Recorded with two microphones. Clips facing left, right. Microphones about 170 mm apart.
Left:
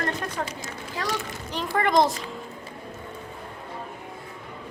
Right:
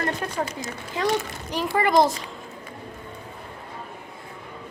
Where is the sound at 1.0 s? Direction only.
20° right (ahead or behind).